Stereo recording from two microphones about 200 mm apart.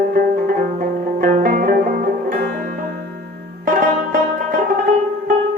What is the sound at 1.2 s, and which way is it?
Music, 45° right (ahead or behind).